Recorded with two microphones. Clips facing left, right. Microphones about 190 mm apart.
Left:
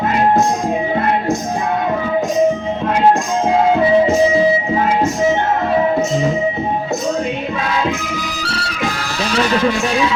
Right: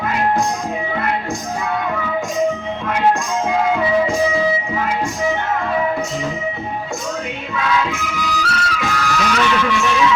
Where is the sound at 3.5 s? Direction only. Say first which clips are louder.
Left 5 dB; 30° left (ahead or behind).